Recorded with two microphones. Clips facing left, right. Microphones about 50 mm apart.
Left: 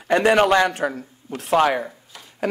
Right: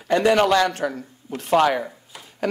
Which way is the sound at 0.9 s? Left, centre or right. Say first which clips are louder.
Even; centre.